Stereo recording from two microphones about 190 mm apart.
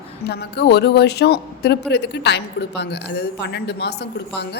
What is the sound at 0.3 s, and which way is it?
Speech, 60° left (ahead or behind).